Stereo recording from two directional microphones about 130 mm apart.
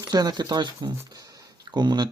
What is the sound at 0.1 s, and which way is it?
Speech, 30° right (ahead or behind).